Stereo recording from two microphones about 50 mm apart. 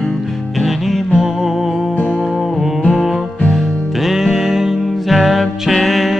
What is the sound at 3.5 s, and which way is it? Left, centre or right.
Music, centre.